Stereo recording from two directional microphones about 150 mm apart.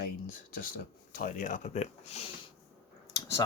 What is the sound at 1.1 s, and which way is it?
Speech, 60° left (ahead or behind).